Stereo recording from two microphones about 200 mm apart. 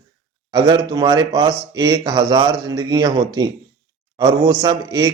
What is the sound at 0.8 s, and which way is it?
A man's voice, 15° right (ahead or behind).